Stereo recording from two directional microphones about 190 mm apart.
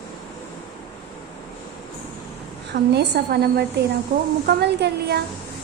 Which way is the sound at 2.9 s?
60° right (ahead or behind).